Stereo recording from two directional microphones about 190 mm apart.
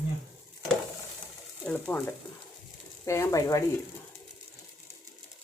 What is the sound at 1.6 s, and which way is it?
Speech, 5° left (ahead or behind).